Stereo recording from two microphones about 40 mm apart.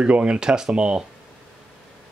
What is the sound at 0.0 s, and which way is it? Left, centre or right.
Speech, right.